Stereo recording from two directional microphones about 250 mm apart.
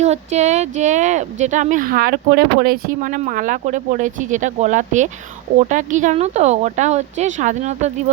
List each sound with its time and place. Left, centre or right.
0.0 s speech: right